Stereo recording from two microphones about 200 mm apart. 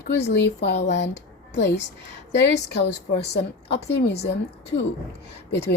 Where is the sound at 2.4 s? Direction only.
55° left (ahead or behind).